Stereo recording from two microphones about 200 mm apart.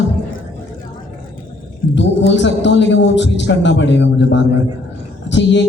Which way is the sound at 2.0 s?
65° left (ahead or behind).